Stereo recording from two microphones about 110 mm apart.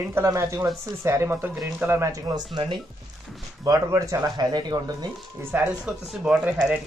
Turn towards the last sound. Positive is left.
turn(degrees=-10)  # may be behind; listen again after turning